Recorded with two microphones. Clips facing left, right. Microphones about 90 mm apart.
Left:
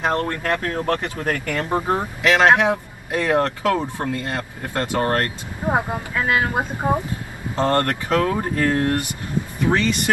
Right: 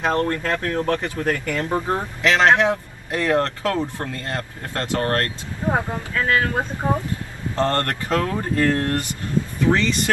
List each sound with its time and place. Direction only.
0.3 s speech: 35° left (ahead or behind)
0.9 s speech: 20° left (ahead or behind)